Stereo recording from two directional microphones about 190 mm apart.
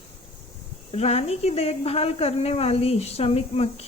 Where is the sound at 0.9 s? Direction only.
30° left (ahead or behind).